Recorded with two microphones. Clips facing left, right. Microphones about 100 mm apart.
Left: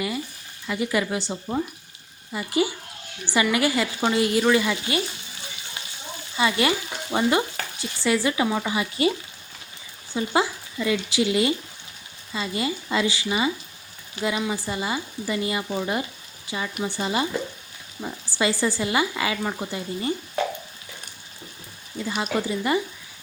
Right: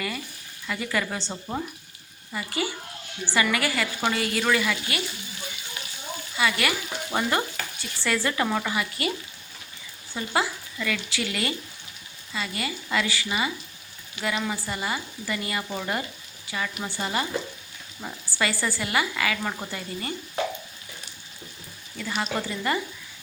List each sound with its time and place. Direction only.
0.7 s speech: 20° left (ahead or behind)
1.3 s speech: centre (ahead or behind)
2.3 s speech: 20° left (ahead or behind)
6.3 s speech: 25° left (ahead or behind)
10.2 s speech: 20° left (ahead or behind)
18.3 s speech: 20° left (ahead or behind)
21.9 s speech: 15° left (ahead or behind)